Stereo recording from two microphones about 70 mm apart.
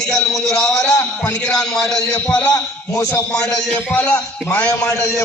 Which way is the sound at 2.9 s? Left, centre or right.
Left.